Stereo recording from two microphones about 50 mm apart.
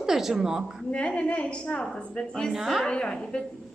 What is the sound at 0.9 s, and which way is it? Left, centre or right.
A woman's voice, left.